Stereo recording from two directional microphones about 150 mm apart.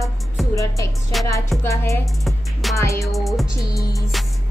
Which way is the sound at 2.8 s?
20° left (ahead or behind).